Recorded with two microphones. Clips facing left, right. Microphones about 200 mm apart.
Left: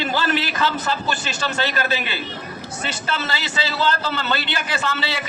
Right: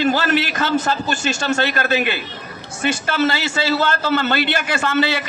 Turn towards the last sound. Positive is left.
turn(degrees=-50)  # may be behind; listen again after turning